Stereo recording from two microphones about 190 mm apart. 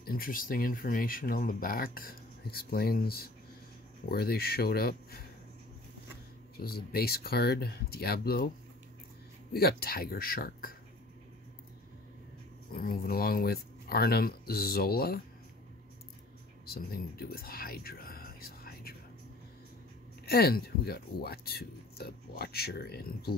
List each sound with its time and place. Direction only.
0.0 s speech: 50° left (ahead or behind)
6.5 s speech: 55° left (ahead or behind)
9.5 s speech: 55° left (ahead or behind)
12.7 s speech: 50° left (ahead or behind)
16.6 s speech: 50° left (ahead or behind)
20.2 s speech: 55° left (ahead or behind)